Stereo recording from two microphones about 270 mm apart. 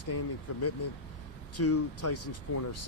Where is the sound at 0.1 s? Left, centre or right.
Left.